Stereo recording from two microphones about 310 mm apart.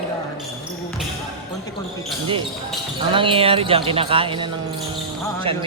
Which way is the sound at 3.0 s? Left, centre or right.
Centre.